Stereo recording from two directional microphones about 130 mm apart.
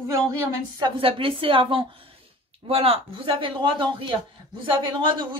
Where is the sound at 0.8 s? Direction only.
45° right (ahead or behind).